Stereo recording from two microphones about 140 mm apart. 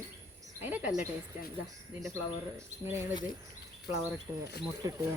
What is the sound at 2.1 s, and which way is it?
Speech, 20° right (ahead or behind).